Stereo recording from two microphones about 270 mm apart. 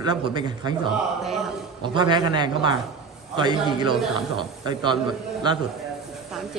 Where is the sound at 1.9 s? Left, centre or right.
Centre.